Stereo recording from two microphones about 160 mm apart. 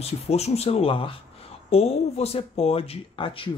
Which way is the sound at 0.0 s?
40° left (ahead or behind).